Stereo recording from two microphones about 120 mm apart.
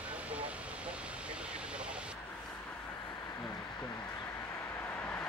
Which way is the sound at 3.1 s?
35° left (ahead or behind).